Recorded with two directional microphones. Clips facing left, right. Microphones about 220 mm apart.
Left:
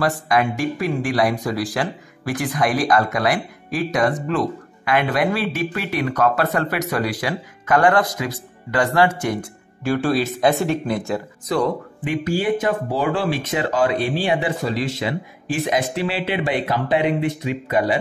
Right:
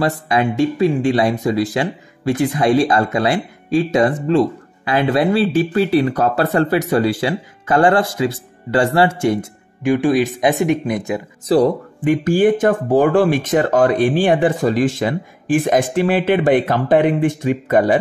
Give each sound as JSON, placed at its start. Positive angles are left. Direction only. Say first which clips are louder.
{"t": 0.0, "sound": "speech", "louder": "right 2 dB", "side_deg": -25}
{"t": 11.4, "sound": "speech", "louder": "right 7 dB", "side_deg": -35}
{"t": 12.0, "sound": "speech", "louder": "right 9 dB", "side_deg": -45}